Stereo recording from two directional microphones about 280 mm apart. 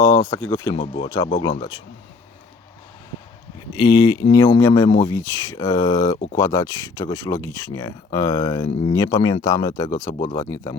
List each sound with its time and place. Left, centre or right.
0.2 s speech: centre
3.8 s speech: centre